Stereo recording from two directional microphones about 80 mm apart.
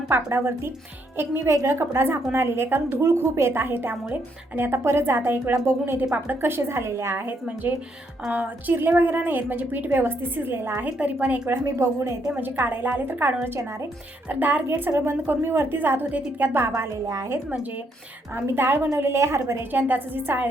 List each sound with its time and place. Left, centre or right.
0.1 s a woman's voice: right
8.3 s a woman's voice: right
11.4 s a woman's voice: right
12.3 s a woman's voice: right
17.1 s a woman's voice: right
17.3 s a woman's voice: centre